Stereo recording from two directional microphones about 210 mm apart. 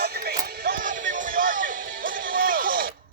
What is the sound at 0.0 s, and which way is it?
Music, 50° right (ahead or behind).